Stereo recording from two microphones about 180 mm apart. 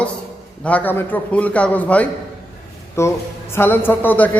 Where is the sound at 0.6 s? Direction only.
10° left (ahead or behind).